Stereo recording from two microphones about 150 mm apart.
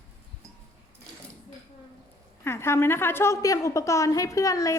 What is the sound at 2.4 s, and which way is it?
A woman's voice, 15° left (ahead or behind).